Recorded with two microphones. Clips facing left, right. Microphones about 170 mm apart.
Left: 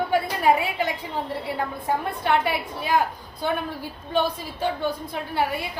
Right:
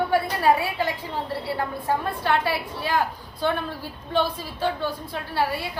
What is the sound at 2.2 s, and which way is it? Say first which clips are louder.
Speech: left 2 dB; 20° left (ahead or behind).